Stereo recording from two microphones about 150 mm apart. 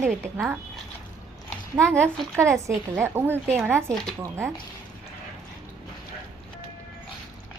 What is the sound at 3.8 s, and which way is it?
Speech, 5° left (ahead or behind).